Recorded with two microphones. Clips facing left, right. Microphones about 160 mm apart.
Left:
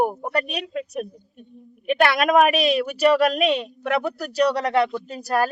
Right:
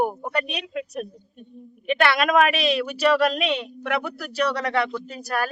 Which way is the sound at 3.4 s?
40° left (ahead or behind).